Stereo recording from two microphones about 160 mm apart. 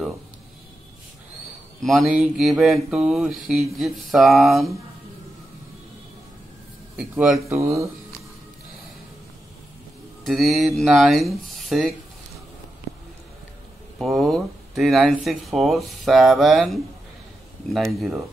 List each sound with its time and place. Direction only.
1.8 s speech: centre (ahead or behind)
7.0 s speech: 5° right (ahead or behind)
7.3 s speech: 20° right (ahead or behind)
10.2 s speech: centre (ahead or behind)
13.9 s speech: centre (ahead or behind)